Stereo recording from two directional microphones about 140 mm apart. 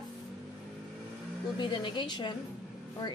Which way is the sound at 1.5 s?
35° left (ahead or behind).